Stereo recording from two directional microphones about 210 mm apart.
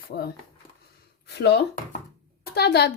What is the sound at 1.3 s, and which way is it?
A woman's voice, 50° left (ahead or behind).